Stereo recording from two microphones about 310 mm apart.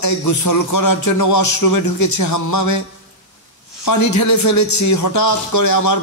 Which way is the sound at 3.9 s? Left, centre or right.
Left.